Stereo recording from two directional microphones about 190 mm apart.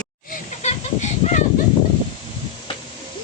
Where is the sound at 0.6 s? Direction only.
35° left (ahead or behind).